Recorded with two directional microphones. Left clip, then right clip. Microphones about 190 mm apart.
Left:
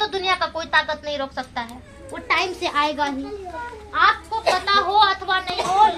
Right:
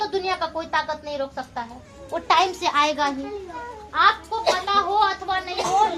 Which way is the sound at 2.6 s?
15° right (ahead or behind).